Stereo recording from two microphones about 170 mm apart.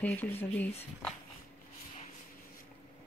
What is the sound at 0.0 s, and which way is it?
Speech, 10° left (ahead or behind).